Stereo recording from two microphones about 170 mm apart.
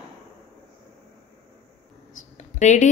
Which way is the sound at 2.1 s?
45° left (ahead or behind).